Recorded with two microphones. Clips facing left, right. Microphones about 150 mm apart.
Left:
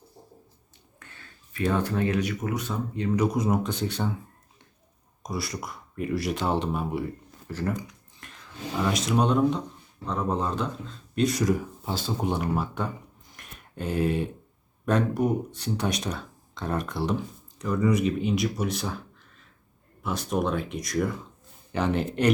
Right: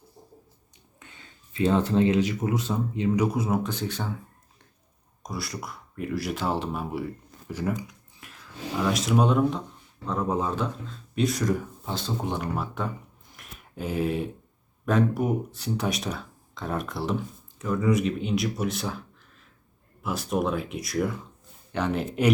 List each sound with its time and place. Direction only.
0.9 s speech: 20° right (ahead or behind)
3.3 s speech: 5° right (ahead or behind)
5.2 s speech: centre (ahead or behind)
13.3 s a sound: 5° right (ahead or behind)
14.8 s speech: 5° right (ahead or behind)